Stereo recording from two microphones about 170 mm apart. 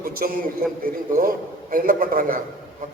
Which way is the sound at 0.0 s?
55° right (ahead or behind).